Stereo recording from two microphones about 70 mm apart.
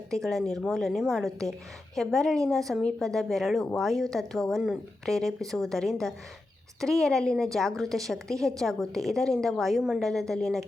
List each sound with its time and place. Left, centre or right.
0.1 s a woman's voice: centre